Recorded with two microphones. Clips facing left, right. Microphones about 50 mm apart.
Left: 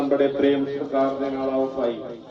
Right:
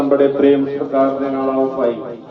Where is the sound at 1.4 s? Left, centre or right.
Right.